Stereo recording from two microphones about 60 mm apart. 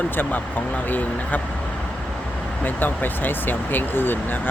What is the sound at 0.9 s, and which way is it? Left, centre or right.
Speech, left.